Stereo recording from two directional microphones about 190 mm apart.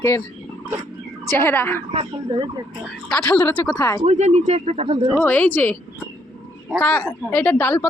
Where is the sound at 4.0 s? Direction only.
35° right (ahead or behind).